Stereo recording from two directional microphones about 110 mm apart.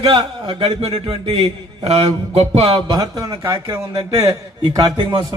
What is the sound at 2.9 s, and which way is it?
A man's voice, 35° right (ahead or behind).